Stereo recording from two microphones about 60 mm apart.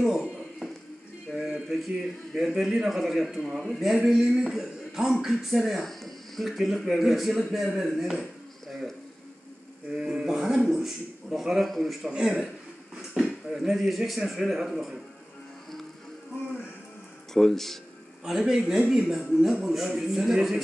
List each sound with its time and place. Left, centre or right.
0.0 s a sound: centre
2.3 s speech: centre
9.9 s a man's voice: centre
12.1 s a man's voice: centre
12.9 s speech: centre
17.3 s speech: centre
18.2 s a man's voice: centre